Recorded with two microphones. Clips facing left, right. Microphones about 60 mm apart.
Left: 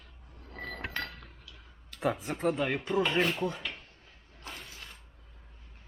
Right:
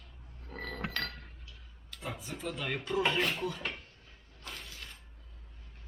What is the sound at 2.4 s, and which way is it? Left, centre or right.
Speech, left.